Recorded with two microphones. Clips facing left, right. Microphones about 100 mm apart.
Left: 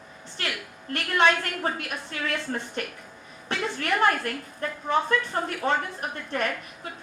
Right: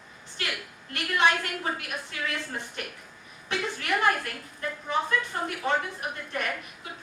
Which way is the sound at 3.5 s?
40° left (ahead or behind).